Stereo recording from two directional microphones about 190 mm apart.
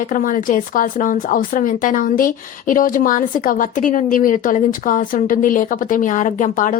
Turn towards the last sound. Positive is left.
turn(degrees=45)  # may be behind; listen again after turning